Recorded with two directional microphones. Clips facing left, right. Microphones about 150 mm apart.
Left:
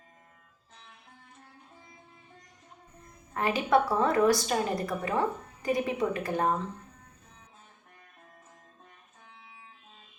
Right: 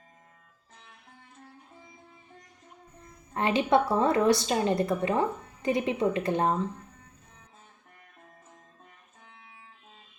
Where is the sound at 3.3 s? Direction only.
25° right (ahead or behind).